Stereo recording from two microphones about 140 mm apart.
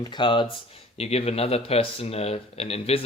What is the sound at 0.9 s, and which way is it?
Speech, 45° left (ahead or behind).